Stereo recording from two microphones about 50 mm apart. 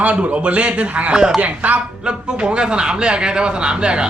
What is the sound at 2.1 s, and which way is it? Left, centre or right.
Speech, centre.